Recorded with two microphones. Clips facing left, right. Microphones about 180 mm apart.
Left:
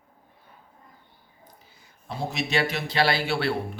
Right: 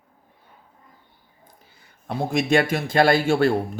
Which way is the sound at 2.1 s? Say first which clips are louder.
Right 7 dB; 50° right (ahead or behind).